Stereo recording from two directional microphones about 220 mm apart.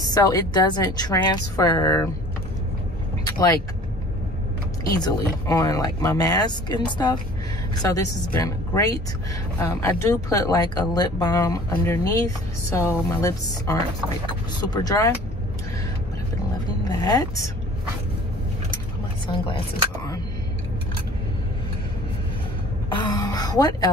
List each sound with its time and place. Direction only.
0.1 s speech: 15° left (ahead or behind)
3.3 s speech: 15° left (ahead or behind)
4.9 s speech: 15° left (ahead or behind)
16.8 s a woman's voice: 20° left (ahead or behind)
19.2 s speech: 25° left (ahead or behind)
22.8 s throat clearing: 20° left (ahead or behind)